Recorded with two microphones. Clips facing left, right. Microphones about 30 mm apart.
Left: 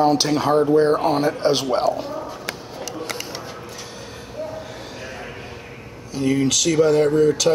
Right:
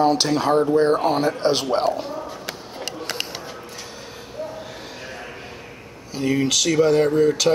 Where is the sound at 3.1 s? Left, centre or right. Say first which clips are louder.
Right 1 dB; right.